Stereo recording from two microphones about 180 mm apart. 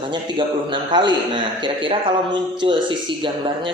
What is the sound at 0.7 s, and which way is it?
A man's voice, 25° right (ahead or behind).